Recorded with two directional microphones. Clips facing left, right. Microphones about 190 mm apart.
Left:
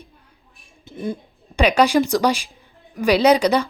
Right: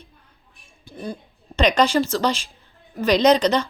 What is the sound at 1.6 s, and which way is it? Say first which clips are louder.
A woman's voice: left 2 dB; 10° left (ahead or behind).